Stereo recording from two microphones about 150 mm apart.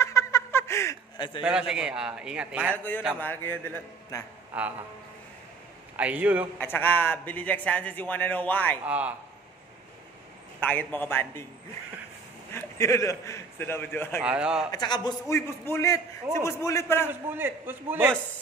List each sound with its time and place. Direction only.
0.0 s a sound: 20° left (ahead or behind)
1.1 s a sound: 30° left (ahead or behind)
1.4 s a man's voice: 5° right (ahead or behind)
3.2 s speech: 15° left (ahead or behind)
4.5 s a man's voice: 10° right (ahead or behind)
5.9 s a man's voice: 10° right (ahead or behind)
6.6 s speech: 15° left (ahead or behind)
8.8 s a man's voice: 10° right (ahead or behind)
10.6 s speech: 10° left (ahead or behind)
12.5 s a man's voice: 20° left (ahead or behind)
14.2 s a man's voice: 5° right (ahead or behind)
14.7 s a man's voice: 30° left (ahead or behind)
15.3 s a man's voice: 15° left (ahead or behind)
17.1 s a man's voice: 15° right (ahead or behind)